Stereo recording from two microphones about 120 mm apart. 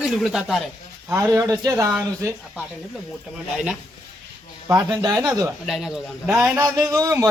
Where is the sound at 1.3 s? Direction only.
25° right (ahead or behind).